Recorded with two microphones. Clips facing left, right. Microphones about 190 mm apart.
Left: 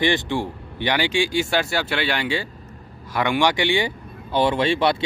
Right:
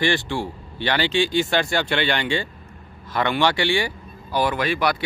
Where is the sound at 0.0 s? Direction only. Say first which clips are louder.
Left 1 dB; 20° left (ahead or behind).